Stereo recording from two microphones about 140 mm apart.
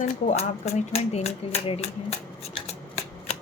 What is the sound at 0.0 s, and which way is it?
Speech, 55° left (ahead or behind).